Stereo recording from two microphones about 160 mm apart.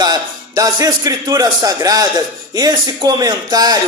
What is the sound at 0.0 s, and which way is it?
Speech, 25° right (ahead or behind).